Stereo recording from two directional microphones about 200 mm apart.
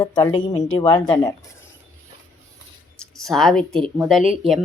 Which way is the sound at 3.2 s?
Centre (ahead or behind).